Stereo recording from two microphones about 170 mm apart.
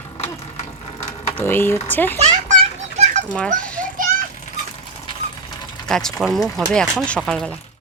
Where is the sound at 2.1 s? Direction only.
35° right (ahead or behind).